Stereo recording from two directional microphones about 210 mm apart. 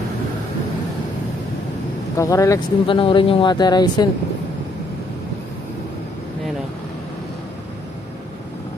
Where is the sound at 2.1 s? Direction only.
15° left (ahead or behind).